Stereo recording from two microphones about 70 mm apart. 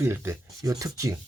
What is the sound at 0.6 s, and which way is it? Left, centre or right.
Rub, right.